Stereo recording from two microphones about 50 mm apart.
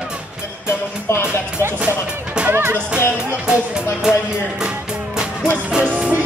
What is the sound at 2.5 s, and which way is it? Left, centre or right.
Music, right.